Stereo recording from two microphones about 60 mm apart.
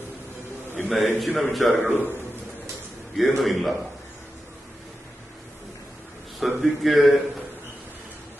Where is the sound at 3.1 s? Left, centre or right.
Centre.